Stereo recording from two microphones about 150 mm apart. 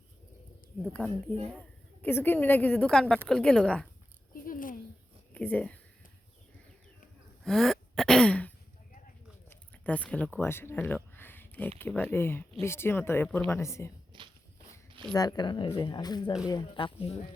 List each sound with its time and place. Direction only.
0.9 s a woman's voice: 5° left (ahead or behind)
4.4 s a sound: 65° left (ahead or behind)
5.3 s speech: 10° left (ahead or behind)
7.4 s throat clearing: centre (ahead or behind)
9.5 s a sound: 10° left (ahead or behind)
11.8 s speech: 10° left (ahead or behind)
14.1 s walk: 30° right (ahead or behind)
15.1 s speech: 25° left (ahead or behind)